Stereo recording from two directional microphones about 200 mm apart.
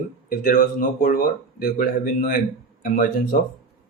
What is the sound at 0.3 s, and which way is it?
Speech, 45° left (ahead or behind).